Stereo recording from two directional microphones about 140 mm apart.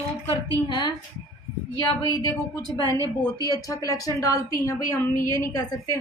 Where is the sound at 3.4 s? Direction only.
25° left (ahead or behind).